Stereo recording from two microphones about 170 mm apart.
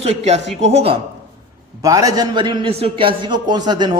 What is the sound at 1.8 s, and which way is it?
A man's voice, 20° right (ahead or behind).